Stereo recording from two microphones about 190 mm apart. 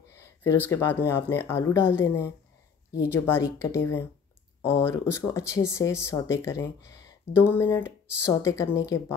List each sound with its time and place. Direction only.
0.1 s speech: 15° left (ahead or behind)